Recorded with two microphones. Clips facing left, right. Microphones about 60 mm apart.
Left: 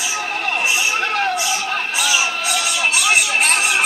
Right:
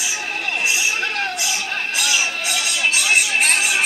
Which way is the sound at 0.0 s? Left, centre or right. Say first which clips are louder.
Left 3 dB; left.